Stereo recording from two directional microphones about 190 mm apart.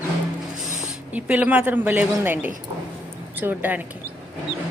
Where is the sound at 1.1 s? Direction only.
10° right (ahead or behind).